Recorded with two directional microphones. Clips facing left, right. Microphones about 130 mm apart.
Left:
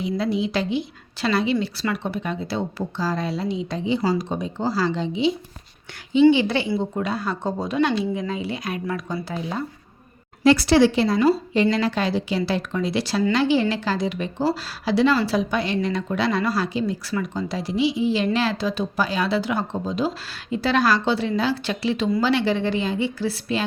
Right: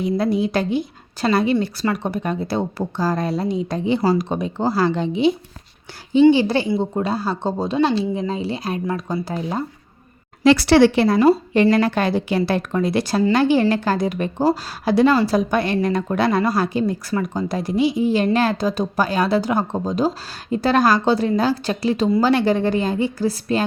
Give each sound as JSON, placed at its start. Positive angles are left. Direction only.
{"t": 0.0, "sound": "a woman's voice", "side_deg": -50}
{"t": 6.3, "sound": "speech", "side_deg": -40}
{"t": 10.4, "sound": "a woman's voice", "side_deg": -85}